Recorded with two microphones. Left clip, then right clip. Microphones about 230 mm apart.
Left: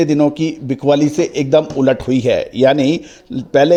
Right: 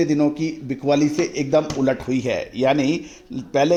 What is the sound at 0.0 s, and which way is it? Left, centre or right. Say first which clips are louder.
A man's voice: left 6 dB; left.